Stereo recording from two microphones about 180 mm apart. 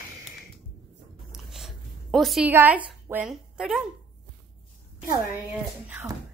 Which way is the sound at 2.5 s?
10° right (ahead or behind).